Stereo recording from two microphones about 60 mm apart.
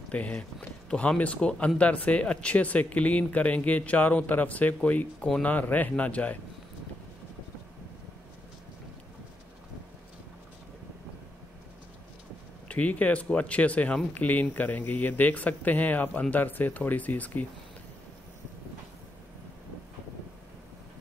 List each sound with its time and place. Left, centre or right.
0.1 s speech: left
12.6 s speech: left